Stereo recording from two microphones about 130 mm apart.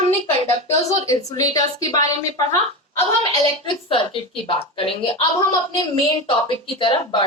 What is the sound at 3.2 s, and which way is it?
A woman's voice, 40° left (ahead or behind).